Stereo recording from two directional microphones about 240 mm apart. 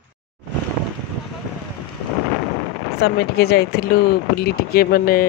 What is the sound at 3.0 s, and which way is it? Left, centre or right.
Speech, left.